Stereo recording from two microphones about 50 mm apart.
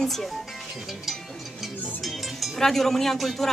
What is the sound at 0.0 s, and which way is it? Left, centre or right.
Speech, centre.